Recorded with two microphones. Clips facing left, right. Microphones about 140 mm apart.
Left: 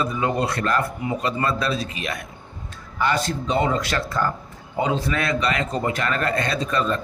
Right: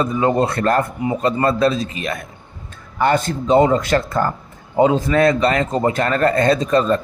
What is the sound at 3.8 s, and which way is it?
Speech, 45° right (ahead or behind).